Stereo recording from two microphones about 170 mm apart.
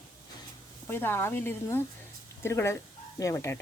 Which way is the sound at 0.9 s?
10° left (ahead or behind).